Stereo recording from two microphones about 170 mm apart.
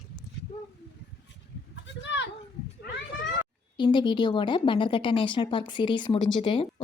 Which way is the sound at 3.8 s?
25° left (ahead or behind).